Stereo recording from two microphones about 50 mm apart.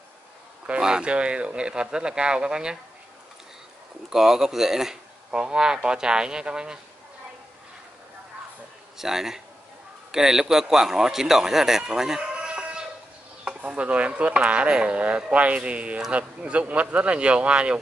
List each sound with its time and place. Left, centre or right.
0.7 s speech: centre
4.1 s speech: centre
8.9 s speech: centre
12.4 s chicken: centre
13.4 s speech: centre